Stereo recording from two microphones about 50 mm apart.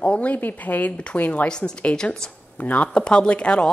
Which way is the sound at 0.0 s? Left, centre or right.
Left.